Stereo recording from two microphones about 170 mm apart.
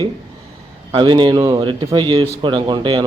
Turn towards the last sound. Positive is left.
turn(degrees=-30)  # may be behind; listen again after turning